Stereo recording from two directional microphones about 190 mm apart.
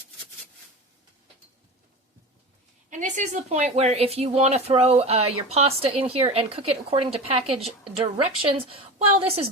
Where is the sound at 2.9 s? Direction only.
40° right (ahead or behind).